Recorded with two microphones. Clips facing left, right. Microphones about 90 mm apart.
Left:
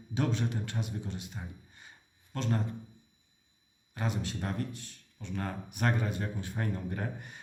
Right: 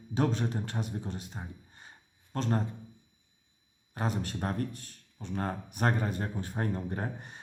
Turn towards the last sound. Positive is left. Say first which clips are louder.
# right 1 dB
turn(degrees=-35)  # may be behind; listen again after turning